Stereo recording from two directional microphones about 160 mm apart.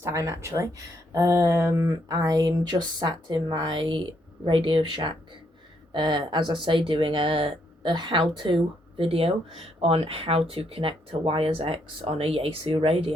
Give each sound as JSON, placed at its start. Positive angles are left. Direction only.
{"t": 0.0, "sound": "speech", "side_deg": -20}